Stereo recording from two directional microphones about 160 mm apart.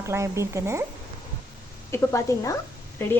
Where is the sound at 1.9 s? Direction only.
20° left (ahead or behind).